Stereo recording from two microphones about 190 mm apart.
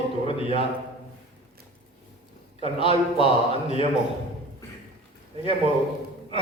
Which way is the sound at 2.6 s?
30° left (ahead or behind).